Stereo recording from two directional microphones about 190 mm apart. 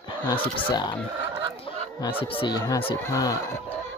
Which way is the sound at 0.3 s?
20° left (ahead or behind).